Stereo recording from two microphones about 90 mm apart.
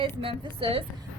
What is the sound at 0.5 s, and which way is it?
Speech, 90° right.